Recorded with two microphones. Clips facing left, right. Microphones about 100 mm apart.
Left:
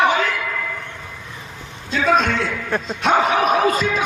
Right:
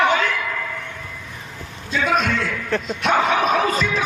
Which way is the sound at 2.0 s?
30° left (ahead or behind).